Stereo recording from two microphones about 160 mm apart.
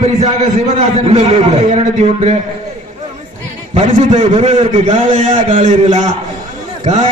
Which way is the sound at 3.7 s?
45° right (ahead or behind).